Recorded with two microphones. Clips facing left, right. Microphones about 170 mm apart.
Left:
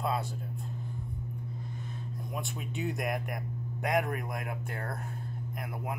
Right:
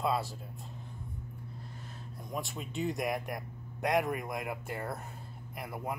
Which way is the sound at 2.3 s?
Centre (ahead or behind).